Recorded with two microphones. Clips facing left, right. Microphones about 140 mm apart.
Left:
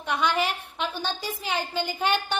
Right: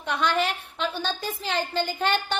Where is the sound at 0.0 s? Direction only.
10° left (ahead or behind).